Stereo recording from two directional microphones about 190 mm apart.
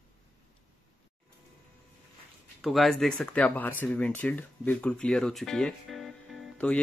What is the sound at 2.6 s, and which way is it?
Speech, centre (ahead or behind).